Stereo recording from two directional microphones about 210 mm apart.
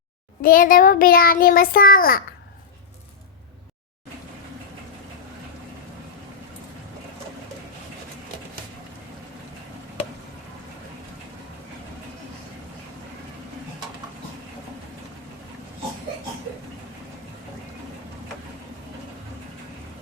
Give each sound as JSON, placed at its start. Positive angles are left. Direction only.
{"t": 0.4, "sound": "child singing", "side_deg": 40}